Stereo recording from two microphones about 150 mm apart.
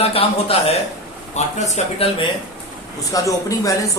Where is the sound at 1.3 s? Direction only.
50° left (ahead or behind).